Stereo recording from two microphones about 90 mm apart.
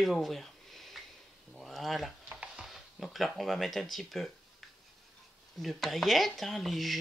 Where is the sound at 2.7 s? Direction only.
5° right (ahead or behind).